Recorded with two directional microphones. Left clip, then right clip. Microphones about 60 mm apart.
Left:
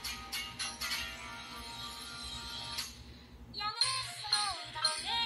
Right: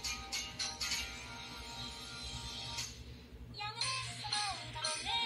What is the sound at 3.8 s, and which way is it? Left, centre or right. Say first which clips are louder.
Music: left 4 dB; left.